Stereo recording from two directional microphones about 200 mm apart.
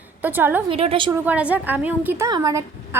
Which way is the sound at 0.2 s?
10° right (ahead or behind).